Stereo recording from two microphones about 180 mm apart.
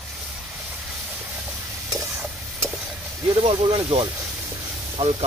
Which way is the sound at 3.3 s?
35° right (ahead or behind).